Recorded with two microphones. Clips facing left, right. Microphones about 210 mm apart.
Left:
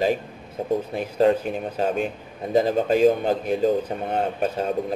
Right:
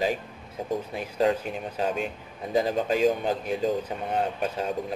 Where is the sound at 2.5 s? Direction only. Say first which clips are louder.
Left 5 dB; 45° left (ahead or behind).